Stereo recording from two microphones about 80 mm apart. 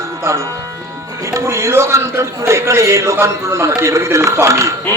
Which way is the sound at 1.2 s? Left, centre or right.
Right.